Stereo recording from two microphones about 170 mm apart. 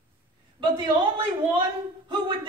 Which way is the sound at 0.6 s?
25° right (ahead or behind).